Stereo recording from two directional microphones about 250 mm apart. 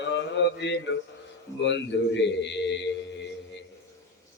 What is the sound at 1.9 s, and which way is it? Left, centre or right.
Mantra, left.